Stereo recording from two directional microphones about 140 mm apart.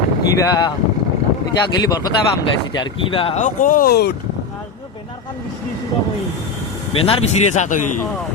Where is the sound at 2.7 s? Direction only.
35° left (ahead or behind).